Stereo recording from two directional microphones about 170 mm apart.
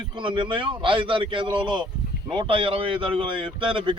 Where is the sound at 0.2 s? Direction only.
30° right (ahead or behind).